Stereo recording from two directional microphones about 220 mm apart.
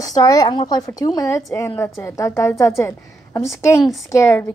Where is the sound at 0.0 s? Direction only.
15° left (ahead or behind).